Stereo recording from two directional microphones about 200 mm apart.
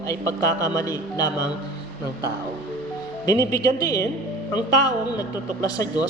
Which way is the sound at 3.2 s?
15° left (ahead or behind).